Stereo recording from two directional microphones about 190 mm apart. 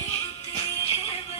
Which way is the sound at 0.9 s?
30° left (ahead or behind).